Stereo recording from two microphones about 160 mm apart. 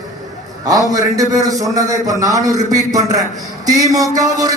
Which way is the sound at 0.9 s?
20° right (ahead or behind).